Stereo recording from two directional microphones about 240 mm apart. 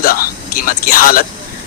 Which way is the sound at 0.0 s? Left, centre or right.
Left.